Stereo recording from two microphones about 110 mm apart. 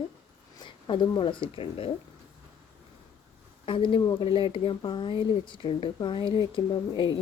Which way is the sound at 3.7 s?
50° left (ahead or behind).